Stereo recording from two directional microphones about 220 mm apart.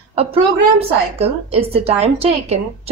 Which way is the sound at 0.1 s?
25° right (ahead or behind).